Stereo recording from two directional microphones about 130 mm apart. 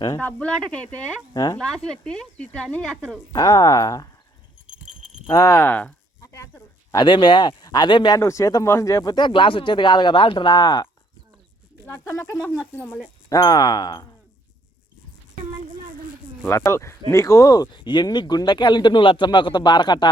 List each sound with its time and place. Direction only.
0.2 s speech: 10° left (ahead or behind)
1.3 s speech: 30° left (ahead or behind)
1.5 s speech: 5° left (ahead or behind)
3.3 s speech: 30° left (ahead or behind)
4.6 s keys jangling: 5° right (ahead or behind)
5.3 s speech: 25° left (ahead or behind)
6.2 s a sound: 25° left (ahead or behind)
6.9 s speech: 35° left (ahead or behind)
8.2 s speech: 25° left (ahead or behind)
11.9 s speech: 20° left (ahead or behind)
12.7 s speech: 10° left (ahead or behind)
13.3 s speech: 30° left (ahead or behind)
16.5 s speech: 25° left (ahead or behind)